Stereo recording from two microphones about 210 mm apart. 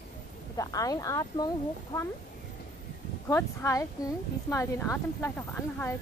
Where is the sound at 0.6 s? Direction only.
15° left (ahead or behind).